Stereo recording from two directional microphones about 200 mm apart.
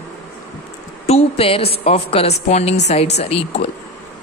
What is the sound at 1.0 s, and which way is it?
A woman's voice, 30° left (ahead or behind).